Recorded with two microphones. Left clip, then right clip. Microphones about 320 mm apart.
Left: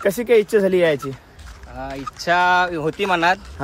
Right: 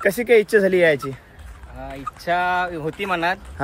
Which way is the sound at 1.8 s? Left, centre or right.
Centre.